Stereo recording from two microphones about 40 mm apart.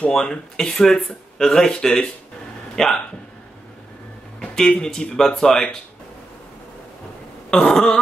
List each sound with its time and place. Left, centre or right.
0.1 s speech: centre
4.4 s speech: centre
7.5 s throat clearing: centre